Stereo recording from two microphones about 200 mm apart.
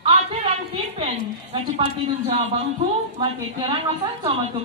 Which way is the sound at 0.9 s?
30° right (ahead or behind).